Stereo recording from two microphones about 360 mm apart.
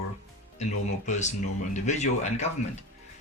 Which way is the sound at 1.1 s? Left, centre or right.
Centre.